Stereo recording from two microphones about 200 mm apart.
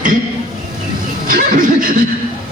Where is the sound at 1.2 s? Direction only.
45° right (ahead or behind).